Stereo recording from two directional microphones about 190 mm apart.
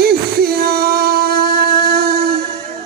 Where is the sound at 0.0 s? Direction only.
55° right (ahead or behind).